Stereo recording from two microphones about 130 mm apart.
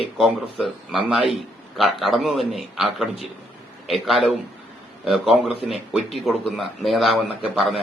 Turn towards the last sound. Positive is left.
turn(degrees=0)  # may be behind; listen again after turning